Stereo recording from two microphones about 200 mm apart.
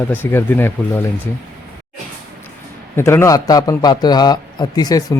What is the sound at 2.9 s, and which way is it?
A man's voice, 10° left (ahead or behind).